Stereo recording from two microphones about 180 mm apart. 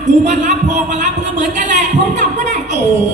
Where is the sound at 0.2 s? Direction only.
40° right (ahead or behind).